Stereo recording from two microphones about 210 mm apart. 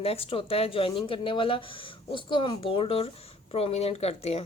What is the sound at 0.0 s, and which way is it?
Speech, 25° left (ahead or behind).